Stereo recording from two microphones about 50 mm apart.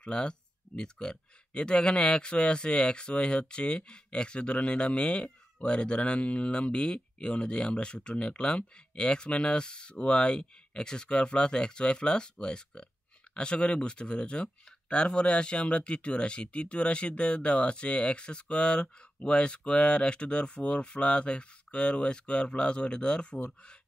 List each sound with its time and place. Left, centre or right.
0.0 s speech: centre